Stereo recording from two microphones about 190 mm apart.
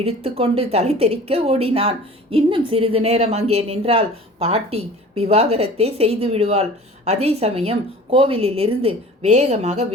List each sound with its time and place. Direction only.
0.0 s a woman's voice: 30° right (ahead or behind)